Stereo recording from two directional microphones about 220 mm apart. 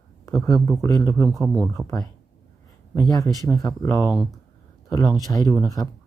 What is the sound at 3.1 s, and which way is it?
Speech, 15° left (ahead or behind).